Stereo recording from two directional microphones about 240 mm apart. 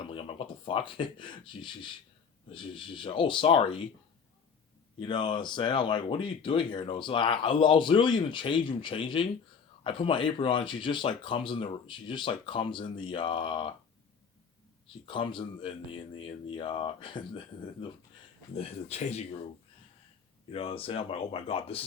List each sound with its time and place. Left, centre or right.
0.1 s speech: left
4.9 s speech: centre
15.0 s speech: centre
20.5 s speech: left